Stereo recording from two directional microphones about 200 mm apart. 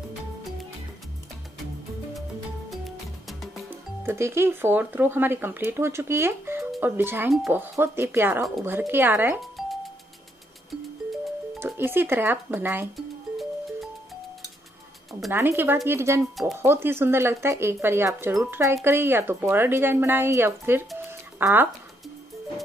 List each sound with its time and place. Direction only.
3.3 s music: centre (ahead or behind)
4.0 s speech: 10° right (ahead or behind)
11.6 s music: 10° right (ahead or behind)
15.3 s speech: 10° right (ahead or behind)
21.1 s music: 10° right (ahead or behind)